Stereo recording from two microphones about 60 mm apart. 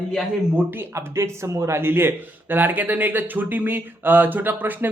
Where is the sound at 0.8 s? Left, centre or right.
Right.